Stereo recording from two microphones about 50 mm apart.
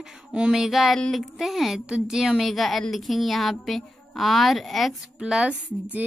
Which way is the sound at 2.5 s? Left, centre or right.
Centre.